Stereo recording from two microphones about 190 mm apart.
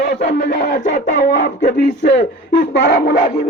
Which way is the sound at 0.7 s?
45° left (ahead or behind).